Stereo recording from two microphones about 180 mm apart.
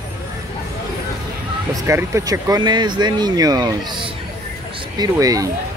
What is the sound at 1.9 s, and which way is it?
Speech, 15° right (ahead or behind).